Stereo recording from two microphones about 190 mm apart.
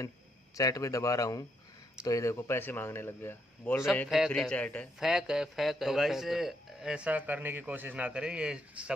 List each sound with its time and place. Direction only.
0.6 s a man's voice: 20° left (ahead or behind); by 8.9 s 5° right (ahead or behind)